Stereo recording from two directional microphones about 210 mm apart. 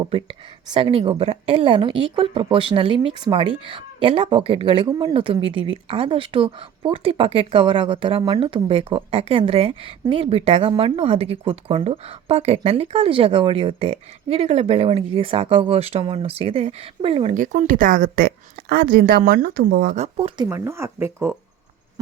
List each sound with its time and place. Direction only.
0.0 s speech: 25° right (ahead or behind); by 20.1 s 40° right (ahead or behind)
20.1 s speech: 25° right (ahead or behind)